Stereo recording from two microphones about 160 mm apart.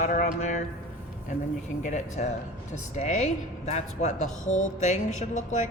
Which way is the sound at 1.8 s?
50° left (ahead or behind).